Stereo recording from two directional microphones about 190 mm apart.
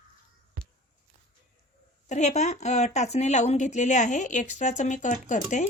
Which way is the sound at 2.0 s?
40° left (ahead or behind).